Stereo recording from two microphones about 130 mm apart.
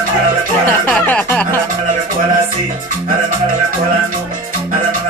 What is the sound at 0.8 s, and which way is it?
Music, 10° left (ahead or behind).